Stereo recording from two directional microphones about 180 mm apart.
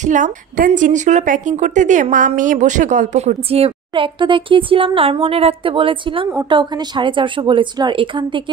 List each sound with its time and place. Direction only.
0.0 s a woman's voice: 45° right (ahead or behind); by 8.3 s 25° right (ahead or behind)